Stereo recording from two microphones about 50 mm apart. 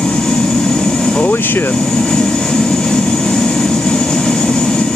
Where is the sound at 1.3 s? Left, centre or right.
Left.